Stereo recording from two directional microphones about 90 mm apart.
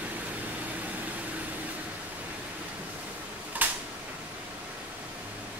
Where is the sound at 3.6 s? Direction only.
20° right (ahead or behind).